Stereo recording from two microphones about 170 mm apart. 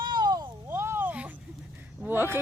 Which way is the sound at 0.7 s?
15° right (ahead or behind).